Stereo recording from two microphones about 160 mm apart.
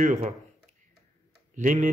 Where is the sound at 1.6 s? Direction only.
50° right (ahead or behind).